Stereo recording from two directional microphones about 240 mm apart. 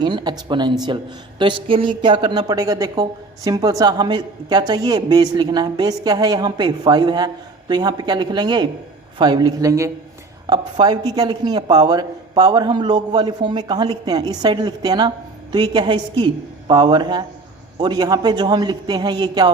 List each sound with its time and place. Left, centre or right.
0.0 s a woman's voice: centre